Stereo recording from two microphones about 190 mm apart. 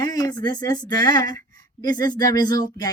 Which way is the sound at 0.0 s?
20° left (ahead or behind).